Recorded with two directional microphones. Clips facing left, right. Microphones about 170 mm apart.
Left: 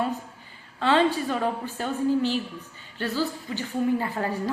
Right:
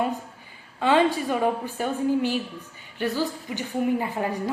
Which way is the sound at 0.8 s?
15° right (ahead or behind).